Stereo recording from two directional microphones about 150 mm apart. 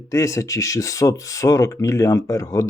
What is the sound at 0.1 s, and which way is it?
Speech, 20° left (ahead or behind).